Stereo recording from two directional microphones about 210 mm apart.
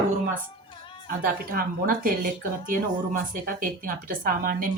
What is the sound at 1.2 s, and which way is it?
Speech, 45° right (ahead or behind).